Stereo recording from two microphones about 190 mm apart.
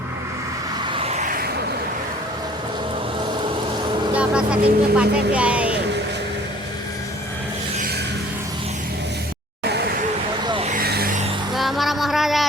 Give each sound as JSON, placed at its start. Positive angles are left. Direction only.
{"t": 0.9, "sound": "a sound", "side_deg": -35}
{"t": 4.1, "sound": "speech", "side_deg": -5}
{"t": 9.6, "sound": "vehicle", "side_deg": -60}
{"t": 10.4, "sound": "vehicle", "side_deg": -25}
{"t": 10.7, "sound": "vehicle", "side_deg": -50}
{"t": 11.5, "sound": "music", "side_deg": 0}